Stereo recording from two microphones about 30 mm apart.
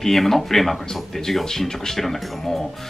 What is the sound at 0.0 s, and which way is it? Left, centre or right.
Speech, centre.